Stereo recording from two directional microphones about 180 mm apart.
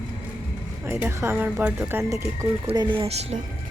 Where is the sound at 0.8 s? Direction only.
15° right (ahead or behind); by 3.4 s 35° right (ahead or behind).